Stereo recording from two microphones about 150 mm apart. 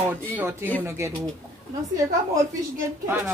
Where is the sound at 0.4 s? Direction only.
15° right (ahead or behind).